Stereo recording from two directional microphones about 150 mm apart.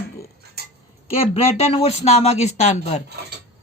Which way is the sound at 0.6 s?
90° right.